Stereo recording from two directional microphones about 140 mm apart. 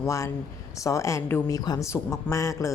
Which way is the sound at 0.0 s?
20° left (ahead or behind).